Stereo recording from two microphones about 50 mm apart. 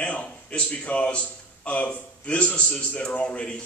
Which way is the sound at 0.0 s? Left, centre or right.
Left.